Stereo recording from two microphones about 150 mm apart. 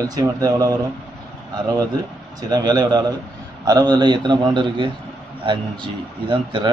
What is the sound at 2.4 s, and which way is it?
A man's voice, 25° right (ahead or behind).